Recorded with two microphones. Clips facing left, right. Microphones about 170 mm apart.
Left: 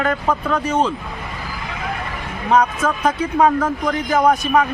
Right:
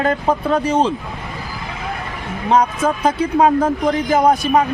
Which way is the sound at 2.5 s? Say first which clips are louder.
Right 1 dB; 30° right (ahead or behind).